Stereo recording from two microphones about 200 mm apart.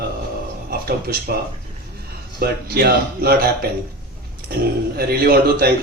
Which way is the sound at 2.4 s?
50° right (ahead or behind).